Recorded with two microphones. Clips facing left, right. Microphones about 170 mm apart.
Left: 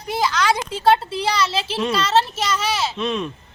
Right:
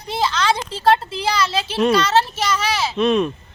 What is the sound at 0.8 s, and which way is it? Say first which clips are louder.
Speech: even; centre (ahead or behind).